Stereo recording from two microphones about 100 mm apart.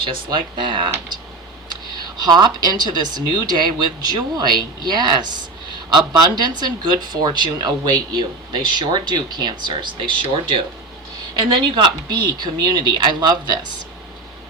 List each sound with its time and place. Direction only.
0.0 s speech: 55° right (ahead or behind)